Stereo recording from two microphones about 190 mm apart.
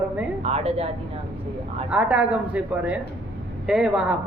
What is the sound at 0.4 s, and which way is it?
Speech, 35° right (ahead or behind).